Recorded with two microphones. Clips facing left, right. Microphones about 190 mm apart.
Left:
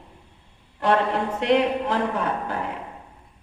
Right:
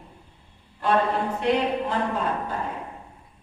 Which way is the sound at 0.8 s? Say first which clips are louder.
Left 1 dB; 85° left.